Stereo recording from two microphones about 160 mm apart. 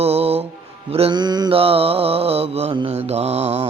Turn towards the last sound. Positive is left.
turn(degrees=-40)  # may be behind; listen again after turning